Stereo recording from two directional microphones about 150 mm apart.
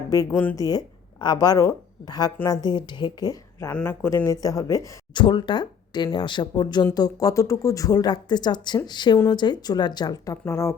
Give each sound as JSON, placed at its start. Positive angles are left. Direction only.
{"t": 0.1, "sound": "speech", "side_deg": 20}
{"t": 3.7, "sound": "speech", "side_deg": 15}
{"t": 5.2, "sound": "speech", "side_deg": 30}